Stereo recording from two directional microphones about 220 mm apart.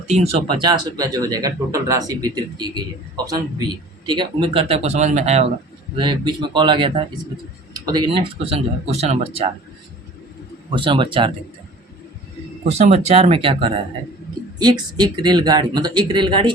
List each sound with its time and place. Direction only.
0.1 s speech: 30° right (ahead or behind)
4.1 s speech: 20° right (ahead or behind)
10.7 s speech: 20° right (ahead or behind)
12.7 s speech: 30° right (ahead or behind)